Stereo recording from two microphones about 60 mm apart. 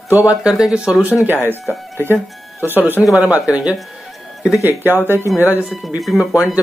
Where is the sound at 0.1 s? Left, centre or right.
Right.